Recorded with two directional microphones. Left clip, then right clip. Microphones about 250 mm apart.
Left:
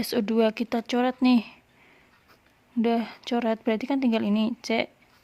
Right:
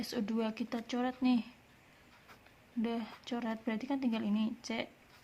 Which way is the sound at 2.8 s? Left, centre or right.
Left.